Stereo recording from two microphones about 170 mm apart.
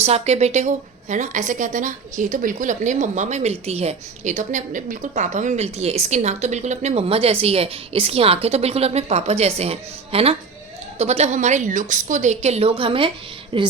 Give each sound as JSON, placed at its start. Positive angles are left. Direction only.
{"t": 0.0, "sound": "a woman's voice", "side_deg": -40}